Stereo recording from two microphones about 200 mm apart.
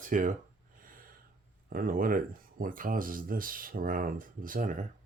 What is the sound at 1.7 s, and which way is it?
Speech, 45° right (ahead or behind).